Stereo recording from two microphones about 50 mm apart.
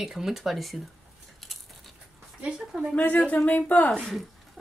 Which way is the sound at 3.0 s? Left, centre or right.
Left.